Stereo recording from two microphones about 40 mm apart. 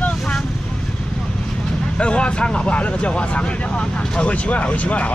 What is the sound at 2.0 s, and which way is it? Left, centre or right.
Speech, left.